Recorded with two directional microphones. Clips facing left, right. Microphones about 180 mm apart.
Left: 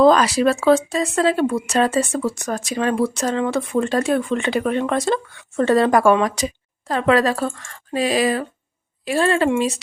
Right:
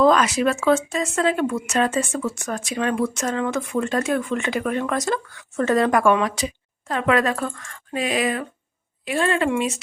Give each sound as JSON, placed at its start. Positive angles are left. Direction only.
{"t": 0.0, "sound": "speech", "side_deg": 35}